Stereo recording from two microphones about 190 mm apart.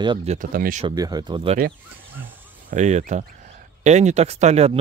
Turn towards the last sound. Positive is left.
turn(degrees=-35)  # may be behind; listen again after turning